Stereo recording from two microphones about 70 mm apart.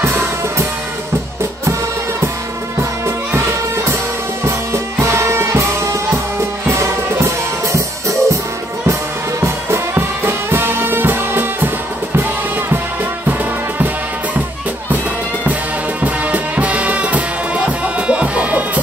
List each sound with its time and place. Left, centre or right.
0.0 s music: right
5.0 s music: right
6.7 s music: right
9.4 s music: right
16.0 s music: right